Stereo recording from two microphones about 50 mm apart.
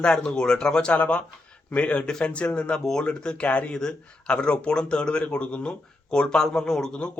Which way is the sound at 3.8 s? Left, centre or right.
Centre.